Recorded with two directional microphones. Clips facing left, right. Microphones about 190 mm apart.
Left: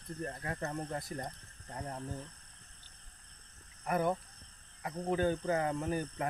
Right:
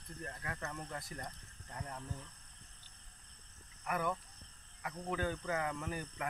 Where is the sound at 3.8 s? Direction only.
35° left (ahead or behind).